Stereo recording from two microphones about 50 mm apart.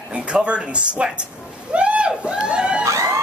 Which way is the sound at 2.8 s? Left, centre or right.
Right.